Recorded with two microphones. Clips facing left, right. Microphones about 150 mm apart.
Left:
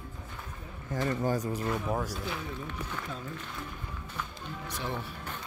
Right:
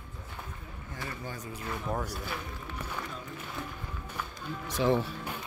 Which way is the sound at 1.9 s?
Centre (ahead or behind).